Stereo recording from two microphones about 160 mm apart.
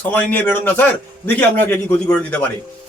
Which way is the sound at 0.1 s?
10° left (ahead or behind).